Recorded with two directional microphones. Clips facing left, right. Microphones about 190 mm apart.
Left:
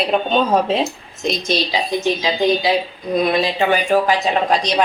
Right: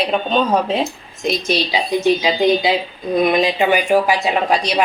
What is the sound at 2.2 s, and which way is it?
A woman's voice, 20° right (ahead or behind).